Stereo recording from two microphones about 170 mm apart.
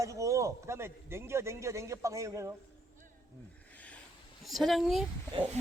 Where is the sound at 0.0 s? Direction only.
20° right (ahead or behind).